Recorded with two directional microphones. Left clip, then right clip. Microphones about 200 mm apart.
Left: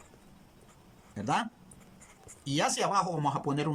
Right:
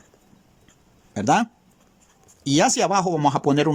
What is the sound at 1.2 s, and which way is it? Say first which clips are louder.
Speech: right 11 dB; 55° right (ahead or behind).